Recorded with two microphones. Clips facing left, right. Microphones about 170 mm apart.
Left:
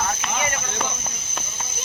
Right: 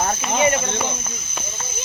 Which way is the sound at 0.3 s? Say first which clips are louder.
Right 9 dB; 25° right (ahead or behind).